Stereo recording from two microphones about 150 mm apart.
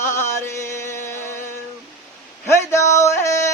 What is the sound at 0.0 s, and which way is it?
Chant, 15° left (ahead or behind).